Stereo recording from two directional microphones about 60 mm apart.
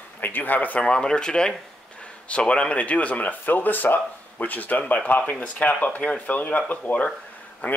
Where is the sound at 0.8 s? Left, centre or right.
Centre.